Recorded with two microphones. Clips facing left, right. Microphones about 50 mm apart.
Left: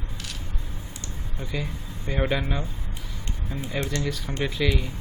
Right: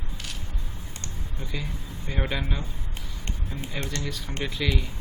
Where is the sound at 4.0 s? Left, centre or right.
Centre.